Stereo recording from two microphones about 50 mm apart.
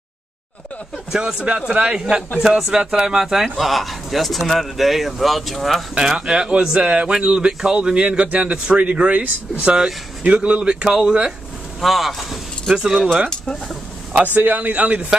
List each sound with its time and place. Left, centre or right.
1.2 s a man's voice: right
3.5 s speech: centre
5.9 s a man's voice: centre
6.8 s speech: right
7.1 s a man's voice: centre
11.8 s speech: centre
14.1 s speech: right